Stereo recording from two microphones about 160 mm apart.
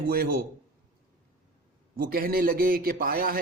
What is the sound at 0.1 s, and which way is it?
Speech, 65° right (ahead or behind).